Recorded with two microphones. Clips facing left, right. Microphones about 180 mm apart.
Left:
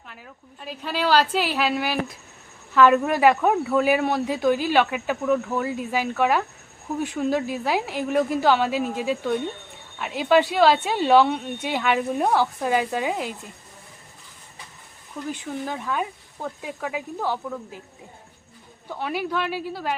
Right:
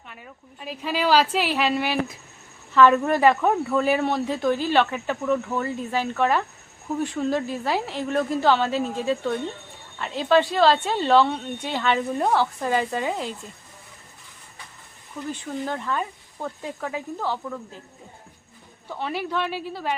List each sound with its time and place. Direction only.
0.1 s speech: centre (ahead or behind)
15.3 s speech: 5° left (ahead or behind)
18.9 s speech: 5° left (ahead or behind)